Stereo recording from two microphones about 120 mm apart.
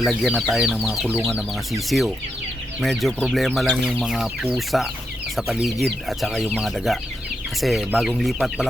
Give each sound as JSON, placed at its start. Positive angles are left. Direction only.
{"t": 0.0, "sound": "speech", "side_deg": -5}